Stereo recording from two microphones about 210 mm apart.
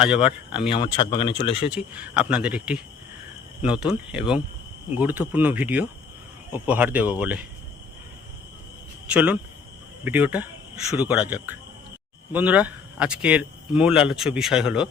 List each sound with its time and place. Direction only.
0.0 s speech: 5° right (ahead or behind)
0.7 s speech: 25° left (ahead or behind)
1.7 s speech: 5° right (ahead or behind)
9.0 s speech: 5° right (ahead or behind)